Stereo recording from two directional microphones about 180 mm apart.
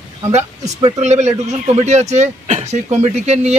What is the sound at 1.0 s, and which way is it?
A man's voice, 40° right (ahead or behind).